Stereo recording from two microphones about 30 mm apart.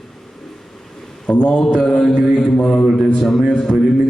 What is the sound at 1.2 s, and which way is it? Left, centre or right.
Speech, left.